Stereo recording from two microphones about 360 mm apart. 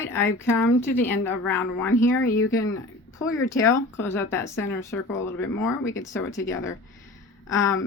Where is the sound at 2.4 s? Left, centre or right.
Left.